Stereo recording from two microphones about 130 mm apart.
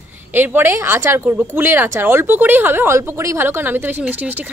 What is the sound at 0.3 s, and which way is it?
Speech, 15° right (ahead or behind).